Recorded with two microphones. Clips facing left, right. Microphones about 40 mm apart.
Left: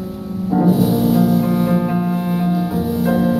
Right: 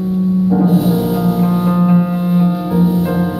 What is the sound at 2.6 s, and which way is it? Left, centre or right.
Music, centre.